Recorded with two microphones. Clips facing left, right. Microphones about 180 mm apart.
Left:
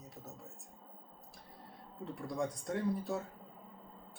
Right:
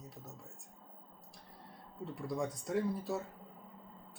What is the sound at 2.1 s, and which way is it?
Speech, centre (ahead or behind).